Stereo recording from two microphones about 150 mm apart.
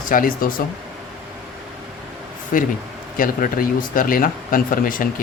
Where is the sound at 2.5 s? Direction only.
65° left (ahead or behind).